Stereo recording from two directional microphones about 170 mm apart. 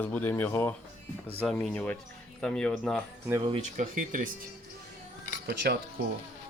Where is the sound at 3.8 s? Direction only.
50° right (ahead or behind).